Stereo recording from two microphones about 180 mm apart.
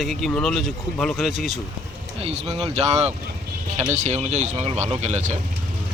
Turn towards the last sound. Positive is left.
turn(degrees=-40)  # may be behind; listen again after turning